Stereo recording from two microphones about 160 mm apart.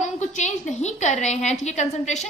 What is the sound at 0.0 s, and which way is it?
A woman's voice, 45° left (ahead or behind).